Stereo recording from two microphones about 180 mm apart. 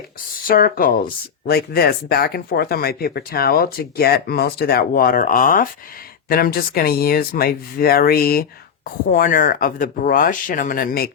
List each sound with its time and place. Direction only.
0.4 s speech: 50° left (ahead or behind)